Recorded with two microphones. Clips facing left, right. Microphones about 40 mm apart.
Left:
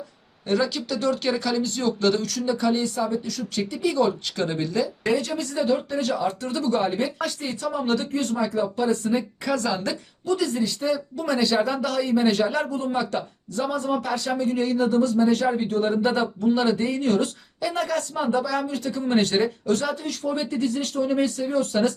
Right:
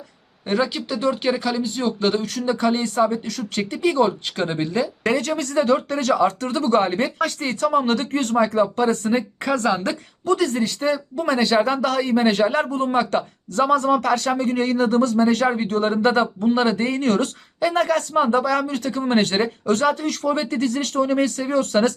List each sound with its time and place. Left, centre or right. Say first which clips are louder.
0.4 s speech: right 2 dB; right
5.1 s speech: right 4 dB; right
6.5 s speech: right 4 dB; right